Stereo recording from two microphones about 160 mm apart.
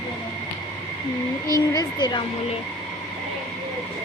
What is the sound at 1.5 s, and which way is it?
Speech, 25° left (ahead or behind).